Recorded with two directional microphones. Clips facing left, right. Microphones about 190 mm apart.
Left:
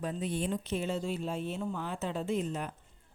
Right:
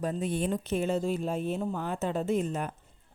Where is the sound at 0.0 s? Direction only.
45° right (ahead or behind).